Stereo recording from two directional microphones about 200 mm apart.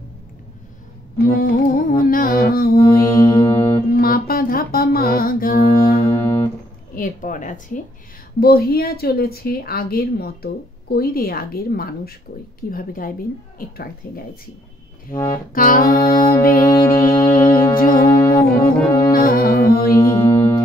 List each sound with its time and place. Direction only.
1.2 s music: 45° left (ahead or behind)
3.0 s music: 25° left (ahead or behind)
3.9 s humming: 45° left (ahead or behind)
6.0 s music: 15° left (ahead or behind)
7.0 s a sound: 40° left (ahead or behind)
8.4 s a woman's voice: 50° left (ahead or behind)
15.3 s a woman's voice: 45° left (ahead or behind)
16.6 s music: 15° left (ahead or behind)
17.7 s a woman's voice: 45° left (ahead or behind)
18.0 s music: 15° left (ahead or behind)
19.1 s music: 45° left (ahead or behind)
20.0 s music: 25° left (ahead or behind)